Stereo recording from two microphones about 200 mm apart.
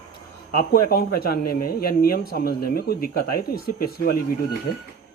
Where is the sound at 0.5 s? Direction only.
45° left (ahead or behind).